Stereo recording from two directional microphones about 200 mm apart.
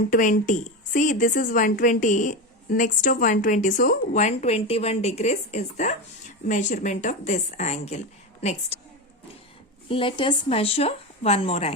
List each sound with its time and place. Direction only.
0.1 s a woman's voice: 45° left (ahead or behind)
9.9 s speech: 25° left (ahead or behind)